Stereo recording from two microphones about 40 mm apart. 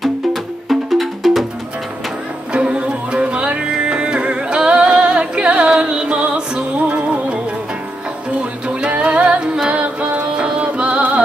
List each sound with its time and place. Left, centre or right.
0.0 s music: centre
2.5 s music: right
8.6 s music: right